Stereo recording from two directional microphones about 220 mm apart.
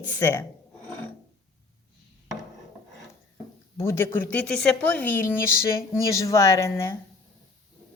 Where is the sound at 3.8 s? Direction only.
10° left (ahead or behind).